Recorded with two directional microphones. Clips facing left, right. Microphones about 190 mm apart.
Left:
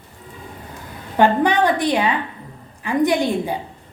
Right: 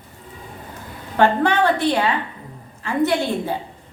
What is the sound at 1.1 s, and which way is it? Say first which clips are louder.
A woman's voice: left 1 dB; 15° left (ahead or behind).